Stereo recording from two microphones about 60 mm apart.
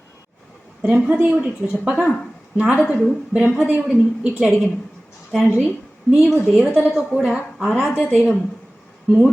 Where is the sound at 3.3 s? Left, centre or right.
Centre.